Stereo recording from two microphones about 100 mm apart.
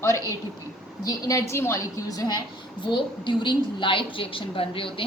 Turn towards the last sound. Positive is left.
turn(degrees=60)  # may be behind; listen again after turning